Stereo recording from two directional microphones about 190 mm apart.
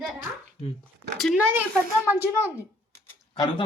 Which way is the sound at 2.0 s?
10° right (ahead or behind).